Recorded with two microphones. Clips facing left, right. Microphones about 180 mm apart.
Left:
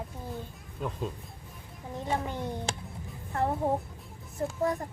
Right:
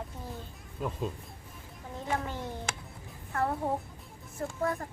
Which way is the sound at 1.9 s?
20° left (ahead or behind).